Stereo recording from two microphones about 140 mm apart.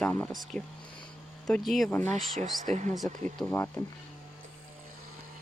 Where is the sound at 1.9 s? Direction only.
10° left (ahead or behind).